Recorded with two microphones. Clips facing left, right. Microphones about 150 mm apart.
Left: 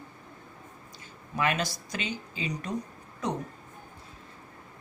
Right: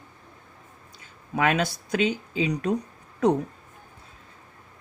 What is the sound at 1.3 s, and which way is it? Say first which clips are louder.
Speech: right 5 dB; 60° right (ahead or behind).